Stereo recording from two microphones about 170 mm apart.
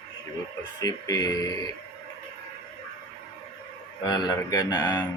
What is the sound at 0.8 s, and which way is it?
Speech, 20° left (ahead or behind).